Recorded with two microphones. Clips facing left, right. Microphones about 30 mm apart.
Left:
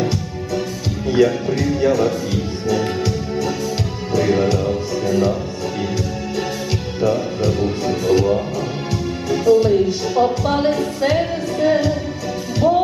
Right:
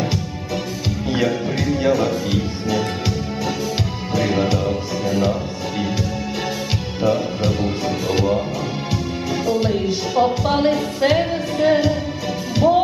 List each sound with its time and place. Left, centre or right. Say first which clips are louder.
1.1 s speech: left 5 dB; centre
4.1 s music: left 3 dB; centre
7.0 s music: left 1 dB; centre